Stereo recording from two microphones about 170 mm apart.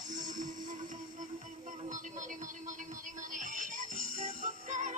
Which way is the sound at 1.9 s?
50° right (ahead or behind).